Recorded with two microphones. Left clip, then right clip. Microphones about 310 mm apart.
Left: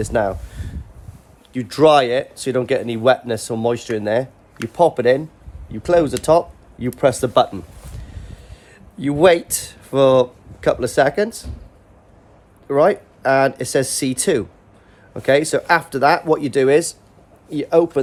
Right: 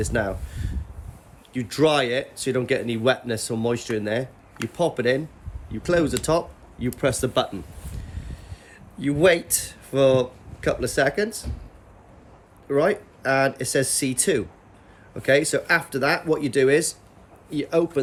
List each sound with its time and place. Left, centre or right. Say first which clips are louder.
0.0 s speech: left 6 dB; centre
8.1 s a sound: left 1 dB; centre
9.0 s speech: left 5 dB; centre
12.6 s speech: left 6 dB; centre